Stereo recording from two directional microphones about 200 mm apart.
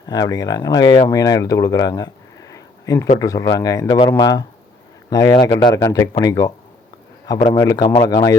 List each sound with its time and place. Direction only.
0.1 s speech: 20° left (ahead or behind)
7.5 s speech: 15° left (ahead or behind)